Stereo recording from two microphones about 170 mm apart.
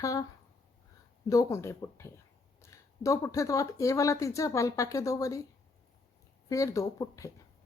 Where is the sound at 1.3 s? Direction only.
20° left (ahead or behind).